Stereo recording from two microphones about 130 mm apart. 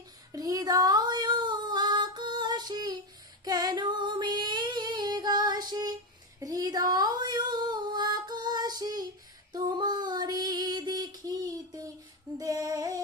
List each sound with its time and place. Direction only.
0.3 s female singing: 25° right (ahead or behind)